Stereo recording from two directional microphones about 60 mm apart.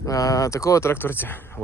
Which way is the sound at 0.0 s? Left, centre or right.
Left.